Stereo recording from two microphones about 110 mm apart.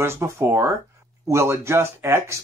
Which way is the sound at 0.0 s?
25° right (ahead or behind).